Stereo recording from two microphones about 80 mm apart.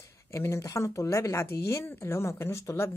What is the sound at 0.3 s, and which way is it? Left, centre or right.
A woman's voice, left.